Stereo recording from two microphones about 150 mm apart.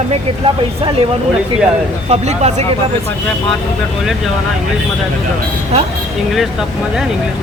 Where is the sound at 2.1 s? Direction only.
45° right (ahead or behind).